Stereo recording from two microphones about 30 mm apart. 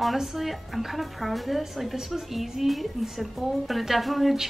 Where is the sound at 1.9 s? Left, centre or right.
Centre.